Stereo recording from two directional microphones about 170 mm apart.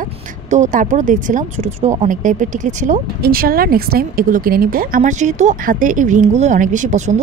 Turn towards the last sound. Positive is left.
turn(degrees=-50)  # may be behind; listen again after turning